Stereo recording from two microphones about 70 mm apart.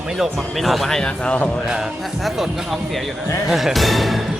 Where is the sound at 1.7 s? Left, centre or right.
Centre.